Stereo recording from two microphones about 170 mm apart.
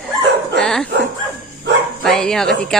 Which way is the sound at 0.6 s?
5° left (ahead or behind).